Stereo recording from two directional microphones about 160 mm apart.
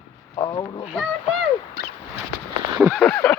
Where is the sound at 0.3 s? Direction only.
25° left (ahead or behind).